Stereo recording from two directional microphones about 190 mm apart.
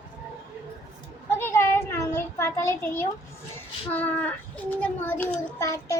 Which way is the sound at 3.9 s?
10° left (ahead or behind).